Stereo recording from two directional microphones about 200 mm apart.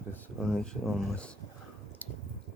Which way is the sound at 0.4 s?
Centre (ahead or behind).